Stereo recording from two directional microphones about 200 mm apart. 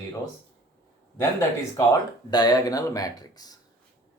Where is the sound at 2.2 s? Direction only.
20° left (ahead or behind).